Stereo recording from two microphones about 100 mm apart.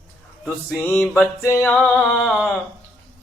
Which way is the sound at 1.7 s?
5° left (ahead or behind).